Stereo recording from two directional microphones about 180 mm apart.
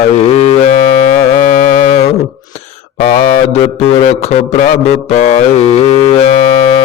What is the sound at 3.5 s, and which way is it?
Mantra, 35° left (ahead or behind).